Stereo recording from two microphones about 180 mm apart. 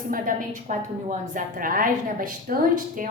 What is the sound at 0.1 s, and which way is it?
A woman's voice, 50° right (ahead or behind).